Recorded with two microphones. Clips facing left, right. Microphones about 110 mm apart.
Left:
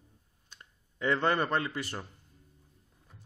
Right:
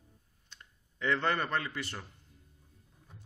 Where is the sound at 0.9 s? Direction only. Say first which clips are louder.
Left 3 dB; 35° left (ahead or behind).